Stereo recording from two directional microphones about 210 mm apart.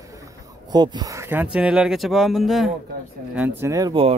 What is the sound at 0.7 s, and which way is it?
Speech, 20° right (ahead or behind).